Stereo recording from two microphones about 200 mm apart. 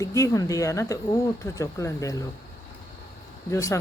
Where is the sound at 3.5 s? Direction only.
15° left (ahead or behind).